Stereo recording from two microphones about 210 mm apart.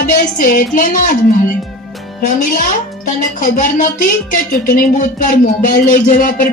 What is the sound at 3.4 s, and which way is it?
Speech, 40° left (ahead or behind).